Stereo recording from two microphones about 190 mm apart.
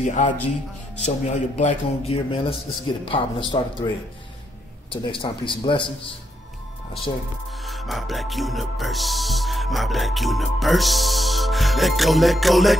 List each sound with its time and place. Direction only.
0.0 s a man's voice: 40° left (ahead or behind); by 3.9 s 25° left (ahead or behind)
4.9 s a man's voice: 25° left (ahead or behind)
7.6 s speech: centre (ahead or behind)